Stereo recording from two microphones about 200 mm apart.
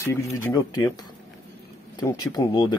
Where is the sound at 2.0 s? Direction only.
20° left (ahead or behind).